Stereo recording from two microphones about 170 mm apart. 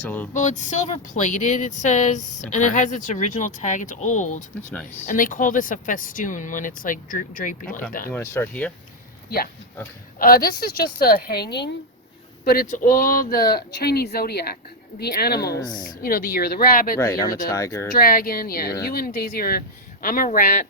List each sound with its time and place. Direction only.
0.0 s speech: 10° left (ahead or behind)
0.3 s speech: 45° left (ahead or behind)
8.1 s speech: 15° left (ahead or behind)
10.2 s speech: 60° left (ahead or behind); by 11.7 s 75° left (ahead or behind)
12.5 s speech: 55° left (ahead or behind)
15.5 s speech: 25° left (ahead or behind)
16.0 s speech: 55° left (ahead or behind)
17.0 s speech: 20° left (ahead or behind)
17.9 s speech: 60° left (ahead or behind)